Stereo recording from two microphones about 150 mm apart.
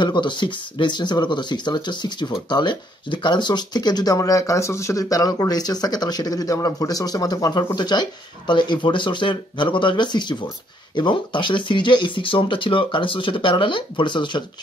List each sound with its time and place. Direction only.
0.0 s speech: 30° left (ahead or behind)